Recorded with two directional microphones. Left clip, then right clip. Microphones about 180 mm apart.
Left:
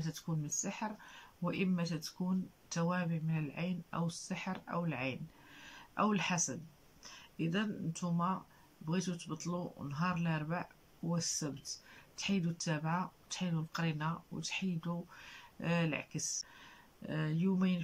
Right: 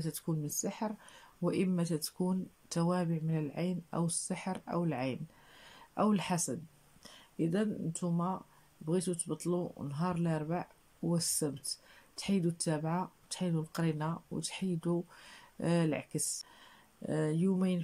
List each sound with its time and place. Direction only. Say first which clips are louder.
0.0 s speech: right 4 dB; 30° right (ahead or behind)